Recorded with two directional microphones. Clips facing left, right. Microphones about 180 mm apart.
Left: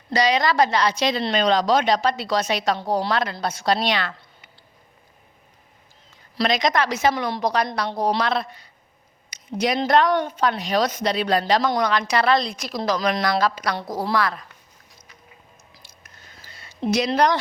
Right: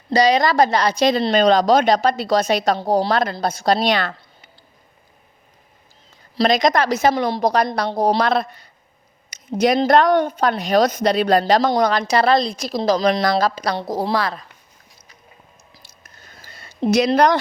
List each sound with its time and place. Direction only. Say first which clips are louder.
0.1 s a woman's voice: right 4 dB; 40° right (ahead or behind)
6.3 s a woman's voice: right 5 dB; 40° right (ahead or behind)
16.4 s a sound: right 5 dB; 50° right (ahead or behind)